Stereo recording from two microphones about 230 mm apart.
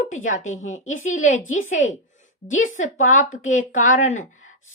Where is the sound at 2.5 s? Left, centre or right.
Left.